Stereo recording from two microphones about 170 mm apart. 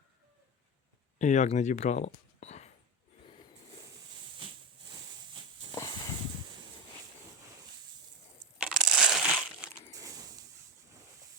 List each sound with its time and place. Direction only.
1.2 s speech: 45° left (ahead or behind)
5.7 s a sound: 20° left (ahead or behind)
8.5 s crushing: 5° right (ahead or behind)